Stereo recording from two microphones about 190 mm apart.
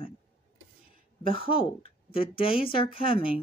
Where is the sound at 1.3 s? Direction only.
30° left (ahead or behind).